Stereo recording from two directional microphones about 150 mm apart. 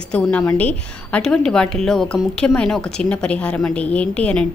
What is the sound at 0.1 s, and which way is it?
A woman's voice, 10° left (ahead or behind).